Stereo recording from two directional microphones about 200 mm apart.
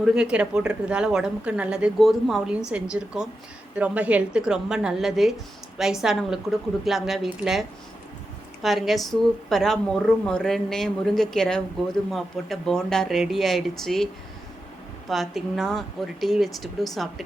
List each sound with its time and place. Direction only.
0.0 s speech: 5° right (ahead or behind)
8.6 s speech: centre (ahead or behind)
15.1 s speech: centre (ahead or behind)